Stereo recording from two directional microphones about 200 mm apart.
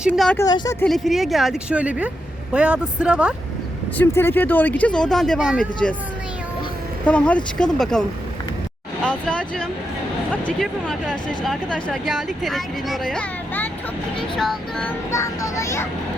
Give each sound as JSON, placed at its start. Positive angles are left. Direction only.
{"t": 0.1, "sound": "speech", "side_deg": 5}
{"t": 0.4, "sound": "speech", "side_deg": 20}
{"t": 0.9, "sound": "speech", "side_deg": 0}
{"t": 3.9, "sound": "speech", "side_deg": 10}
{"t": 7.0, "sound": "speech", "side_deg": 5}
{"t": 9.0, "sound": "speech", "side_deg": 5}